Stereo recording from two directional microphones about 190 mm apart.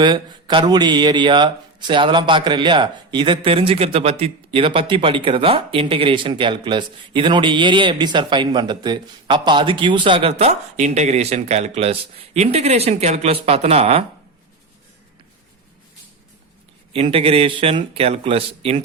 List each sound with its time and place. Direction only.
0.0 s speech: 25° right (ahead or behind)
16.9 s speech: 30° right (ahead or behind)